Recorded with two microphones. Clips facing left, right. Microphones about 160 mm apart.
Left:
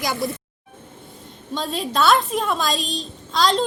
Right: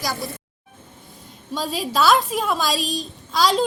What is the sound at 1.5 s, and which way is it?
A woman's voice, 5° right (ahead or behind).